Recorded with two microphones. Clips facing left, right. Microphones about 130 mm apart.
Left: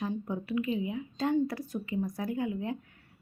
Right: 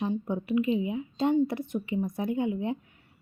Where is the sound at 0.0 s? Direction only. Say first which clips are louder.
Right 4 dB; 20° right (ahead or behind).